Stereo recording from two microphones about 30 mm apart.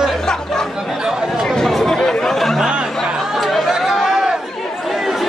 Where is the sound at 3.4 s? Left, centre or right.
Centre.